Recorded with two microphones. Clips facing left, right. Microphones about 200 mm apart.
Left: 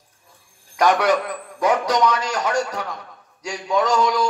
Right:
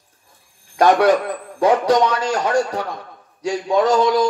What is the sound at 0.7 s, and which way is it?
A man's voice, 30° right (ahead or behind).